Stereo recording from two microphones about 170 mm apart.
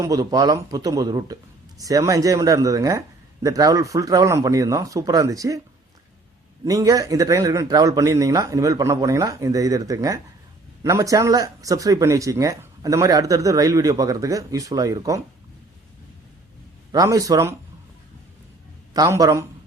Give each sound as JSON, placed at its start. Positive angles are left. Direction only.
{"t": 0.0, "sound": "speech", "side_deg": -20}
{"t": 6.7, "sound": "speech", "side_deg": -20}
{"t": 16.9, "sound": "speech", "side_deg": -20}
{"t": 18.9, "sound": "speech", "side_deg": -20}